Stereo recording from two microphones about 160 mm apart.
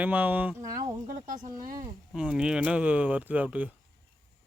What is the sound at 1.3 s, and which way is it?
Speech, 55° right (ahead or behind).